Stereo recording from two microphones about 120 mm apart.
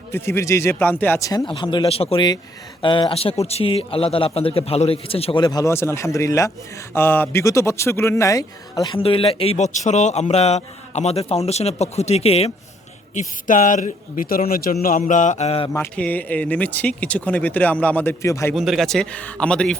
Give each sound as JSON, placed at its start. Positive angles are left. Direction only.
{"t": 0.1, "sound": "speech", "side_deg": 25}
{"t": 1.2, "sound": "speech", "side_deg": 30}
{"t": 1.5, "sound": "speech", "side_deg": 40}
{"t": 1.9, "sound": "a man's voice", "side_deg": 55}
{"t": 2.8, "sound": "a man's voice", "side_deg": 45}
{"t": 5.4, "sound": "speech", "side_deg": 35}
{"t": 5.7, "sound": "speech", "side_deg": 20}
{"t": 9.0, "sound": "a man's voice", "side_deg": 50}
{"t": 13.1, "sound": "speech", "side_deg": 90}
{"t": 14.9, "sound": "speech", "side_deg": 90}
{"t": 16.0, "sound": "speech", "side_deg": 10}
{"t": 18.5, "sound": "a man's voice", "side_deg": 0}